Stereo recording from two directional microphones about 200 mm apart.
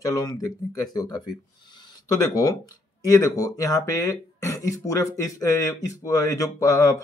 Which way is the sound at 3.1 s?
15° left (ahead or behind).